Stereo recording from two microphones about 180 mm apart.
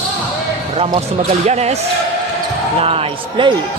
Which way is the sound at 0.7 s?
35° right (ahead or behind).